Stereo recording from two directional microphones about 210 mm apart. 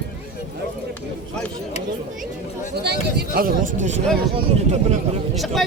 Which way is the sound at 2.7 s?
50° right (ahead or behind).